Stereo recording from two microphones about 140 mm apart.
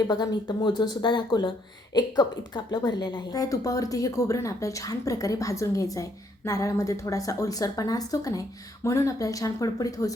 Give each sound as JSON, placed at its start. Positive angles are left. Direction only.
{"t": 0.1, "sound": "speech", "side_deg": 30}